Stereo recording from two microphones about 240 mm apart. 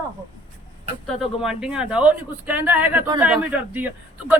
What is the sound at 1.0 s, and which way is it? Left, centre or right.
Speech, centre.